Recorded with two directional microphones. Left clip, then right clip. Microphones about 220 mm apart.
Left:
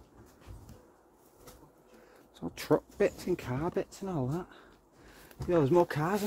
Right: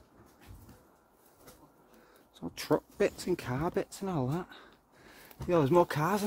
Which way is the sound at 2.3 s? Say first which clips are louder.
Left 2 dB; 5° left (ahead or behind).